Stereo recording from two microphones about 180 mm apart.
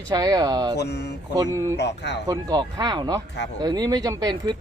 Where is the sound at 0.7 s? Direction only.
65° left (ahead or behind).